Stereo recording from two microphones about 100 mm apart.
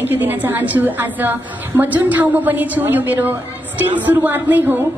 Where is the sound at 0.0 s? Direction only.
20° right (ahead or behind).